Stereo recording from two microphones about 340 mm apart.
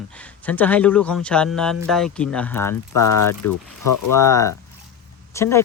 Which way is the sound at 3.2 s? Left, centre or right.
Left.